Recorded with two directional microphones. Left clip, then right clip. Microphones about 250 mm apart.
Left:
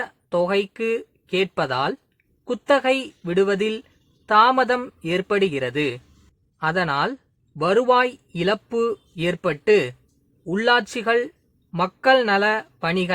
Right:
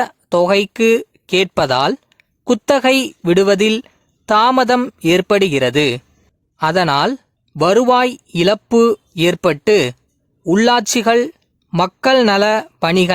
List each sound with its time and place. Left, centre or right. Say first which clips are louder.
0.0 s speech: right 8 dB; right